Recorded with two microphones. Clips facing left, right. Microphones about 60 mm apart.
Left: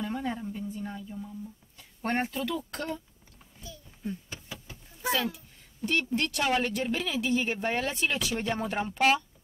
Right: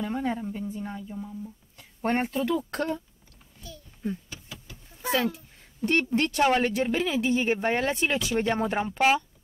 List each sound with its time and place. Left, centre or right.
0.0 s speech: right
4.3 s vehicle: left
5.1 s a sound: right
6.0 s speech: right; by 9.2 s centre